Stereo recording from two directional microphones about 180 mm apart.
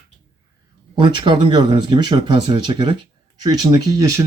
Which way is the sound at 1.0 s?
25° right (ahead or behind).